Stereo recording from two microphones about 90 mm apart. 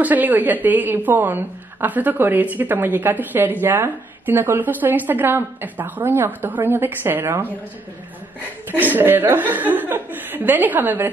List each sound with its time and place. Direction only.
0.0 s a woman's voice: 20° right (ahead or behind)
8.6 s a woman's voice: 20° right (ahead or behind)